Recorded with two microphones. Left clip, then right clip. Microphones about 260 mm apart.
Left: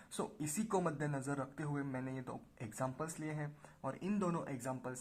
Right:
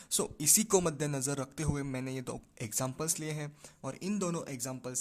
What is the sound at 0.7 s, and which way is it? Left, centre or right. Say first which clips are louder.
Speech: right 7 dB; right.